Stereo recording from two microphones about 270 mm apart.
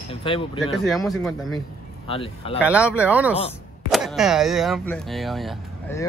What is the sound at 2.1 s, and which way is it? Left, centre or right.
Speech, centre.